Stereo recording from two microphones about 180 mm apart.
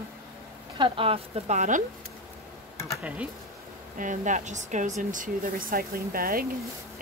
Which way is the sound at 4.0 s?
45° right (ahead or behind).